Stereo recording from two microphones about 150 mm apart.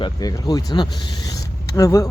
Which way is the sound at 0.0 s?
25° left (ahead or behind).